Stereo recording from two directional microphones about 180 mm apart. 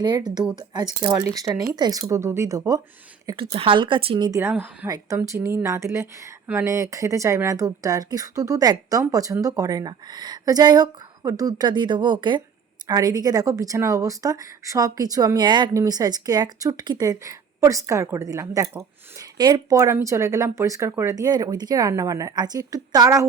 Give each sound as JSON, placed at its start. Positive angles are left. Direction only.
{"t": 0.0, "sound": "speech", "side_deg": -25}
{"t": 3.2, "sound": "speech", "side_deg": -30}
{"t": 4.4, "sound": "a woman's voice", "side_deg": -10}